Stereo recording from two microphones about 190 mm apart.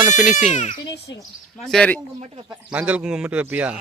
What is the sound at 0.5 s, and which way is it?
Speech, 40° left (ahead or behind).